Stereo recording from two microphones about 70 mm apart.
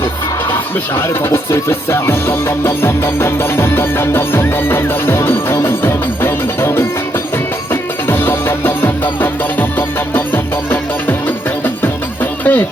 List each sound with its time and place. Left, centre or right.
0.9 s music: left